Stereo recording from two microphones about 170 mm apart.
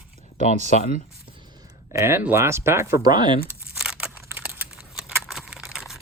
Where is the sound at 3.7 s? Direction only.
5° right (ahead or behind).